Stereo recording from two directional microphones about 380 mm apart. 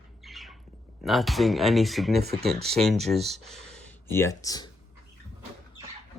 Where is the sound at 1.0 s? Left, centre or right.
Centre.